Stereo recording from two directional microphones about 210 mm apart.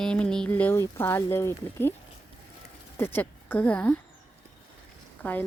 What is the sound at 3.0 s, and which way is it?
Speech, 10° left (ahead or behind).